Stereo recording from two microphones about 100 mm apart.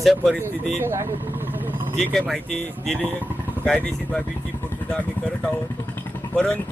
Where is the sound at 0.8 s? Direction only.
25° right (ahead or behind).